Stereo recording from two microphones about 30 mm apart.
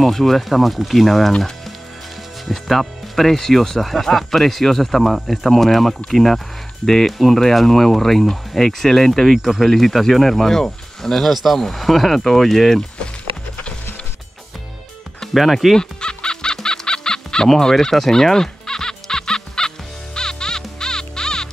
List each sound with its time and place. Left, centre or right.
0.0 s speech: centre
2.4 s speech: centre
9.3 s speech: centre
15.3 s speech: centre
15.7 s fowl: left
18.1 s music: centre